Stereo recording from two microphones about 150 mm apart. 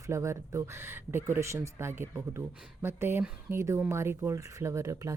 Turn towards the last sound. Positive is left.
turn(degrees=-20)  # may be behind; listen again after turning